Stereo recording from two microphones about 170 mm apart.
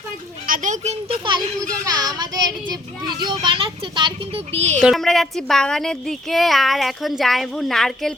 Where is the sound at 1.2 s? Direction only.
25° right (ahead or behind).